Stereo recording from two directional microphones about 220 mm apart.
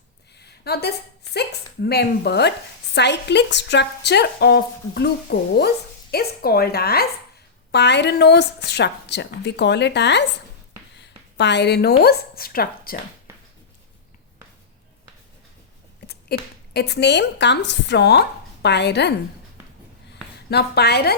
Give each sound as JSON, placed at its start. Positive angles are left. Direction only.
{"t": 0.3, "sound": "a woman's voice", "side_deg": 45}
{"t": 16.3, "sound": "speech", "side_deg": 45}
{"t": 20.5, "sound": "speech", "side_deg": 45}